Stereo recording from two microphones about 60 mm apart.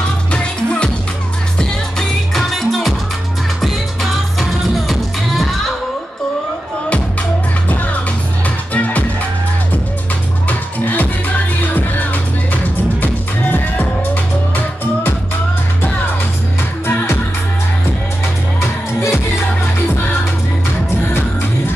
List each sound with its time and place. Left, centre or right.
0.3 s music: centre
1.6 s music: centre
7.6 s music: left
10.5 s music: left
16.8 s music: left
18.6 s music: left